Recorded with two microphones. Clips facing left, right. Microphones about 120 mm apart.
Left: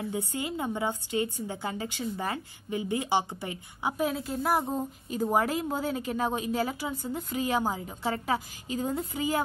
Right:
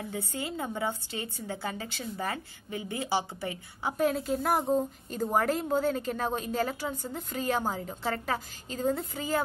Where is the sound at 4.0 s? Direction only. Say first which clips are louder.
Right 3 dB; centre (ahead or behind).